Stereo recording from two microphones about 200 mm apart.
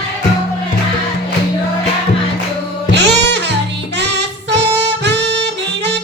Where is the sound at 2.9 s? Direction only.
60° right (ahead or behind).